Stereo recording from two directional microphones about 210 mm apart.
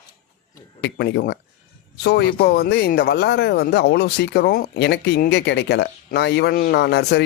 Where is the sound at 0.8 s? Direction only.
50° left (ahead or behind).